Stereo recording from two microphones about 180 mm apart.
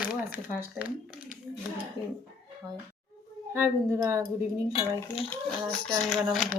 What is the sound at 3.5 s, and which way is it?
Speech, 10° right (ahead or behind).